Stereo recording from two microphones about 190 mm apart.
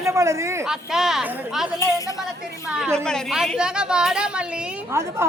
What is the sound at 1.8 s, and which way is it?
Speech, 15° left (ahead or behind).